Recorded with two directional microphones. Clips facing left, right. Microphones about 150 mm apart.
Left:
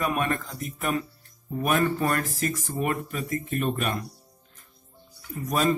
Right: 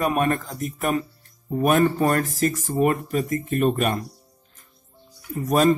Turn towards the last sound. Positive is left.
turn(degrees=-45)  # may be behind; listen again after turning